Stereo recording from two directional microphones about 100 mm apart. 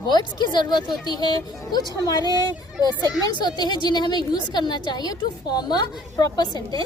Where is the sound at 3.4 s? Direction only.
45° left (ahead or behind).